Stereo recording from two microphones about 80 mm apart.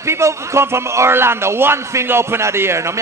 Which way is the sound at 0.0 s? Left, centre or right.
Right.